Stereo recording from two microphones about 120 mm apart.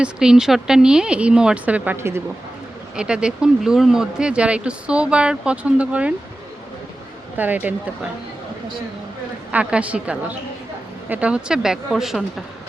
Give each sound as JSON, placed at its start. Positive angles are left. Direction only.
{"t": 0.0, "sound": "speech", "side_deg": -5}
{"t": 2.9, "sound": "speech", "side_deg": -5}
{"t": 7.3, "sound": "speech", "side_deg": -15}
{"t": 9.5, "sound": "speech", "side_deg": -10}